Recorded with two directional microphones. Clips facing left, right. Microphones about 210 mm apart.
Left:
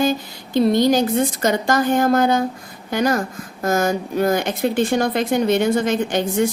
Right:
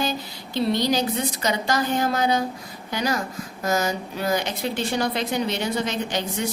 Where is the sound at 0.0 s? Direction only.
50° left (ahead or behind).